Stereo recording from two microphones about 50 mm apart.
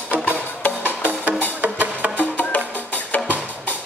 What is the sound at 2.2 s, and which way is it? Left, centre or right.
Music, left.